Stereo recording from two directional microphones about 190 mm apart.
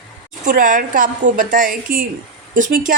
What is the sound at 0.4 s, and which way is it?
A woman's voice, 45° right (ahead or behind).